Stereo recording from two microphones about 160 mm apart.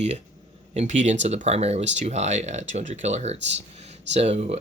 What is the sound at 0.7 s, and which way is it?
Speech, 50° right (ahead or behind).